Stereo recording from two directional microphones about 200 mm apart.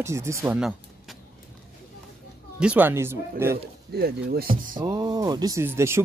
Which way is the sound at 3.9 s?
50° right (ahead or behind).